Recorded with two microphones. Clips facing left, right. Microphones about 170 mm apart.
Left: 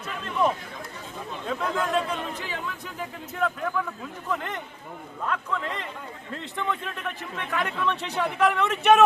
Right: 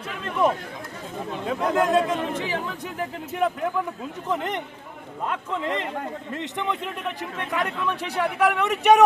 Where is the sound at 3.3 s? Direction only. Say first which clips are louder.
Right 3 dB; 20° right (ahead or behind).